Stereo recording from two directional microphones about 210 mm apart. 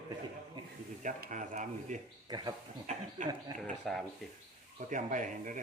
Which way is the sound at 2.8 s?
35° right (ahead or behind).